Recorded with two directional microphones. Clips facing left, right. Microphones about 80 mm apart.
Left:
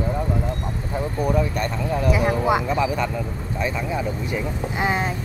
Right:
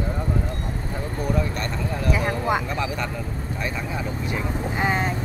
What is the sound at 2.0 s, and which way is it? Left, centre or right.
Speech, centre.